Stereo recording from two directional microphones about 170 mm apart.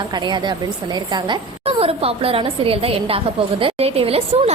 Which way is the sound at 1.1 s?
30° right (ahead or behind).